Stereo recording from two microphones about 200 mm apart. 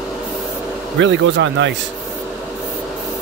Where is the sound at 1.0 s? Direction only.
65° right (ahead or behind).